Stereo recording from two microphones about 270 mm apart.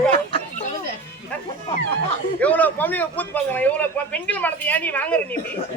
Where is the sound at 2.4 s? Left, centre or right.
Centre.